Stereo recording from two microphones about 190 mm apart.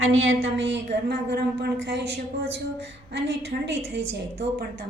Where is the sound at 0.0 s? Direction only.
90° right; by 4.0 s 70° right (ahead or behind).